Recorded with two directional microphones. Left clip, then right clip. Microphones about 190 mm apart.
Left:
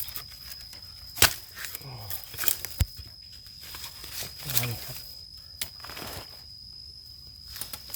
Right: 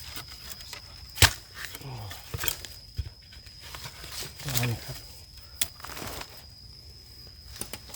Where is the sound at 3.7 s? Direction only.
Centre (ahead or behind).